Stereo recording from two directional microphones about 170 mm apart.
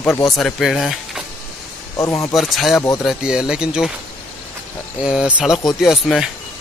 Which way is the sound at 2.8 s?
20° left (ahead or behind).